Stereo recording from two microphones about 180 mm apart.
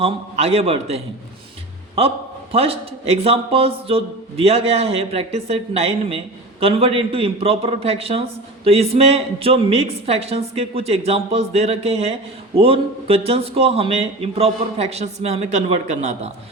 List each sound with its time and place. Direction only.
0.0 s a man's voice: 35° right (ahead or behind)